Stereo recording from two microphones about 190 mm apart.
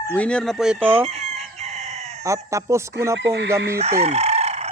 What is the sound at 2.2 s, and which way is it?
Speech, 15° right (ahead or behind).